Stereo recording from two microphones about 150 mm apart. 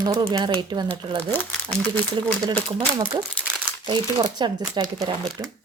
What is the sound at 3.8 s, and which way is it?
Speech, 30° right (ahead or behind).